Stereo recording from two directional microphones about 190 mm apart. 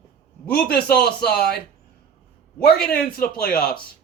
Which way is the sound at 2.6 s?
55° left (ahead or behind).